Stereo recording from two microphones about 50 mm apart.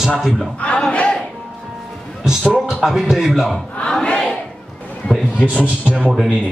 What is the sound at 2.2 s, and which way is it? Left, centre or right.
A man's voice, centre.